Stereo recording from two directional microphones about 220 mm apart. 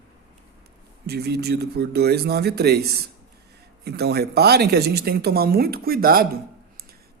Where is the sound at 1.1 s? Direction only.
45° right (ahead or behind).